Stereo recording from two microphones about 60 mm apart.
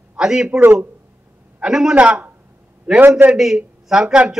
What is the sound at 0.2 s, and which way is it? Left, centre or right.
Speech, centre.